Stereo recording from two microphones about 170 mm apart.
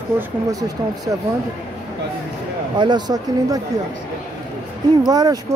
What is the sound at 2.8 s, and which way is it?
Speech, 25° right (ahead or behind).